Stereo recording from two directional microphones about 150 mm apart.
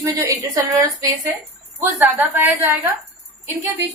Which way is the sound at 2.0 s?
10° right (ahead or behind).